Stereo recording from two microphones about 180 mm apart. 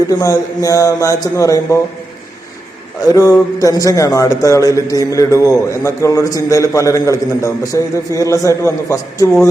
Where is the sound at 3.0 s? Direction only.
20° left (ahead or behind).